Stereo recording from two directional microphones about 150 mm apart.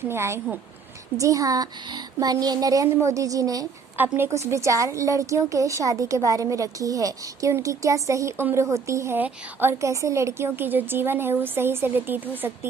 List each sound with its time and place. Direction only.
0.1 s a woman's voice: 15° right (ahead or behind)